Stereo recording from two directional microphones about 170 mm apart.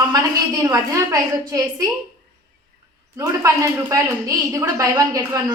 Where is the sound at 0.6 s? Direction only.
20° right (ahead or behind).